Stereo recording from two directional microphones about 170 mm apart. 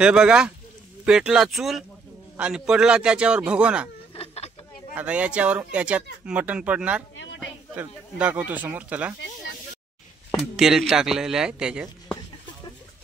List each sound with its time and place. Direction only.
0.0 s a man's voice: 5° right (ahead or behind)
4.1 s insect: 35° left (ahead or behind)
4.9 s speech: 10° right (ahead or behind)
7.2 s a sound: 90° left
7.7 s speech: 10° right (ahead or behind)
10.3 s a man's voice: 5° right (ahead or behind)